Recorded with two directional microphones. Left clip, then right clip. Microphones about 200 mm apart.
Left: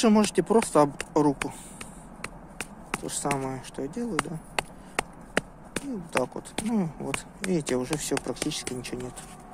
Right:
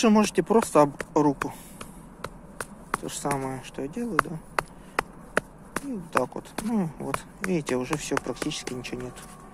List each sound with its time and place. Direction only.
0.0 s speech: centre (ahead or behind)
3.0 s speech: centre (ahead or behind)